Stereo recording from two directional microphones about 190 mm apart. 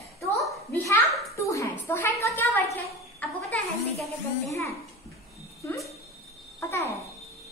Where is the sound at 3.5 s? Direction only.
Centre (ahead or behind).